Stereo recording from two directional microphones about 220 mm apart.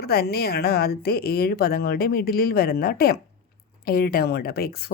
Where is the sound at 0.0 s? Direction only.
45° left (ahead or behind).